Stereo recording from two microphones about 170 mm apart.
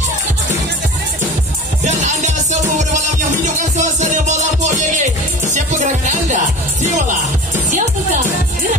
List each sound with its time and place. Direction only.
1.9 s music: 45° right (ahead or behind)